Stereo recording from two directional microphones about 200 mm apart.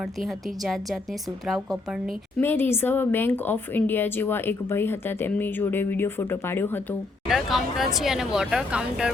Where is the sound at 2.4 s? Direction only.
10° left (ahead or behind).